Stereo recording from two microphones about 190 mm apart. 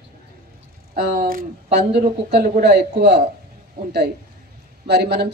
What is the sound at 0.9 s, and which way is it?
Speech, 50° right (ahead or behind).